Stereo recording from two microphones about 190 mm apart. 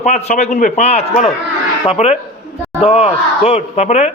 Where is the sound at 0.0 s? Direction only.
35° left (ahead or behind).